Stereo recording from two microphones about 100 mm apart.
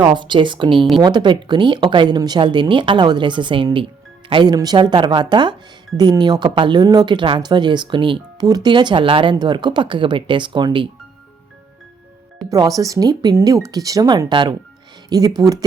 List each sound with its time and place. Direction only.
0.1 s speech: 50° right (ahead or behind)
4.5 s speech: 40° right (ahead or behind); by 9.3 s 60° right (ahead or behind)
9.3 s speech: 45° right (ahead or behind)
12.5 s speech: 35° right (ahead or behind)
15.1 s speech: 40° right (ahead or behind)